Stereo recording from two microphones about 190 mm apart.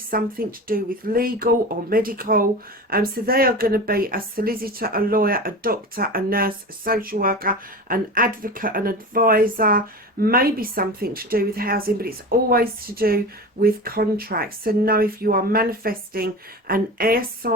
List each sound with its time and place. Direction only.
0.1 s a woman's voice: 50° right (ahead or behind)